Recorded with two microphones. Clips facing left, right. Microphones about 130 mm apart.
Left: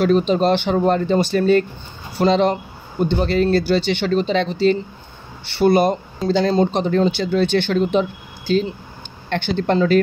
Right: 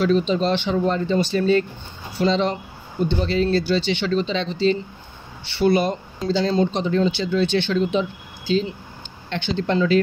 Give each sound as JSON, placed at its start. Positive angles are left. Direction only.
{"t": 0.0, "sound": "speech", "side_deg": 50}